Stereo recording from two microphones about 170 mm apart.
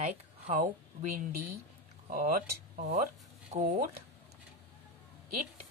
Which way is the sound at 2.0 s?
55° right (ahead or behind).